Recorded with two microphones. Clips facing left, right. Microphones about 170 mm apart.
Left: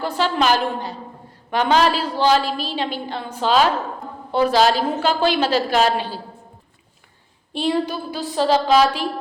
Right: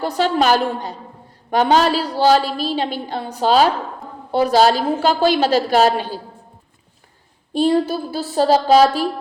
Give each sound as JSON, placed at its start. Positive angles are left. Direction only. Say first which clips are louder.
{"t": 0.0, "sound": "a woman's voice", "louder": "right 3 dB", "side_deg": -40}
{"t": 7.5, "sound": "a woman's voice", "louder": "right 5 dB", "side_deg": -40}